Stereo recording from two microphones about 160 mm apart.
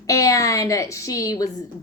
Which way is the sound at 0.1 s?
20° left (ahead or behind).